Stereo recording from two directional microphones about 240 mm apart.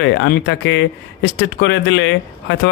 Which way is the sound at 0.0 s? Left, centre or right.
Left.